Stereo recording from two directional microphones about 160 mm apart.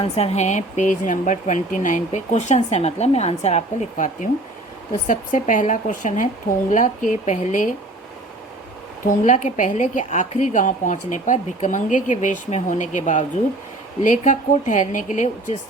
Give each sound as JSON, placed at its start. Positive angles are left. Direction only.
{"t": 0.0, "sound": "speech", "side_deg": 40}
{"t": 9.0, "sound": "speech", "side_deg": 50}